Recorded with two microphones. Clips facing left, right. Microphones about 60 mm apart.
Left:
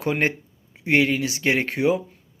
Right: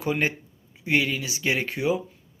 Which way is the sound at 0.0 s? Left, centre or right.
Left.